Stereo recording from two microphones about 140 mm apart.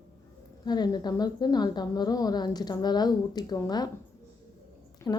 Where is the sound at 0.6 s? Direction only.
30° left (ahead or behind).